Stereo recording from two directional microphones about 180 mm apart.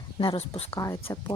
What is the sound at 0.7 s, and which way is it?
Speech, 15° left (ahead or behind).